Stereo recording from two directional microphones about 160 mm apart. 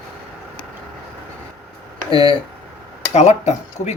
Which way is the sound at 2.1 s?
30° left (ahead or behind).